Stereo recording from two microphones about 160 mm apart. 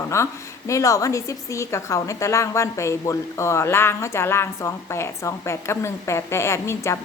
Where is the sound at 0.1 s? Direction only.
20° left (ahead or behind).